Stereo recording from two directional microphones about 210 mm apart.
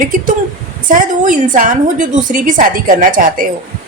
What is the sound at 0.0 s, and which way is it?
A woman's voice, 40° right (ahead or behind).